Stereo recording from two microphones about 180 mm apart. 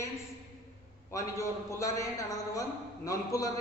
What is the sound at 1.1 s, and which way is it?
A man's voice, 15° left (ahead or behind).